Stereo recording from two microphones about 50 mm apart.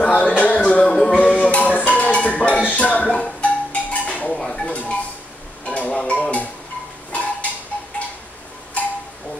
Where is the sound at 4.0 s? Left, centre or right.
Left.